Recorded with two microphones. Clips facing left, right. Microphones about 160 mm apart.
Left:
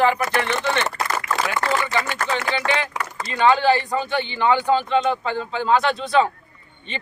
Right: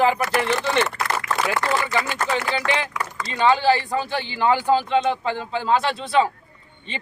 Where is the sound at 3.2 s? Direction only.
30° right (ahead or behind).